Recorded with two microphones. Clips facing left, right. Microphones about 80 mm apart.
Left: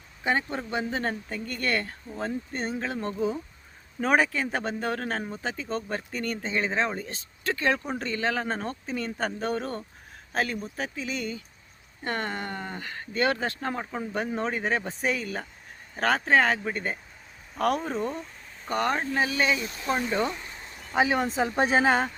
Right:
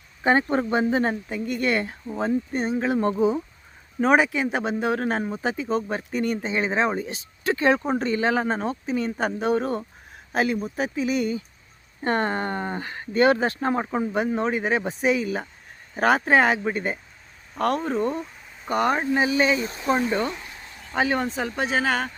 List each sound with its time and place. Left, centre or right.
0.7 s speech: right
1.3 s speech: centre
2.7 s speech: right
4.0 s speech: centre
8.4 s speech: centre
12.0 s speech: right
14.3 s speech: centre
17.5 s speech: centre
20.3 s a sound: centre
20.9 s speech: centre
21.2 s speech: left